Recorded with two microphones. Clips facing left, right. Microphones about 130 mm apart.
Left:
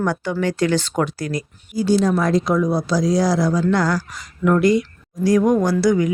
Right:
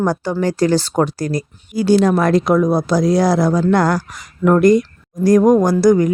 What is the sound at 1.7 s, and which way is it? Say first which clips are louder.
Speech: right 4 dB; 70° right (ahead or behind).